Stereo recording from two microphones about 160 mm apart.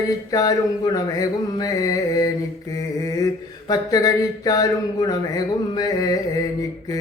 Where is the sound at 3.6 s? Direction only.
20° left (ahead or behind).